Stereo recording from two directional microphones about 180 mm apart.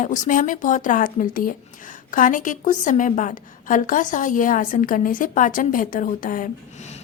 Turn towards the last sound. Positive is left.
turn(degrees=50)  # may be behind; listen again after turning